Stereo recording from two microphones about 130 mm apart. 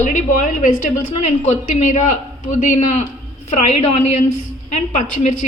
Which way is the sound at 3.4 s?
60° left (ahead or behind).